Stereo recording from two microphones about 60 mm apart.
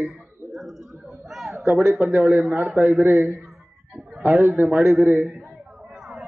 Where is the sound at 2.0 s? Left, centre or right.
Right.